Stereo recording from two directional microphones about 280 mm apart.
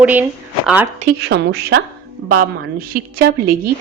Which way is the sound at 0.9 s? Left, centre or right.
Right.